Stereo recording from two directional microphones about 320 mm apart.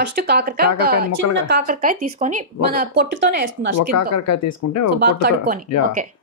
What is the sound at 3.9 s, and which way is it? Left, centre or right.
Speech, left.